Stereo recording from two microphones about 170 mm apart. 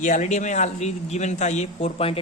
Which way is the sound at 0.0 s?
45° left (ahead or behind).